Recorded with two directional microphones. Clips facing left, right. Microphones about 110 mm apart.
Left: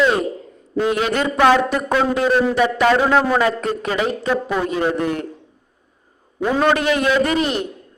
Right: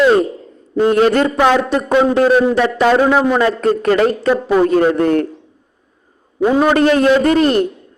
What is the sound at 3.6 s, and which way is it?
A man's voice, 45° right (ahead or behind).